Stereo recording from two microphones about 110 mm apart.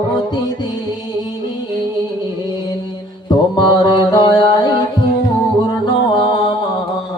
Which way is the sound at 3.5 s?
45° left (ahead or behind).